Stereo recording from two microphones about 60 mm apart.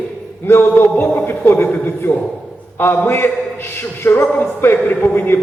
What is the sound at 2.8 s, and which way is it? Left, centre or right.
A man's voice, left.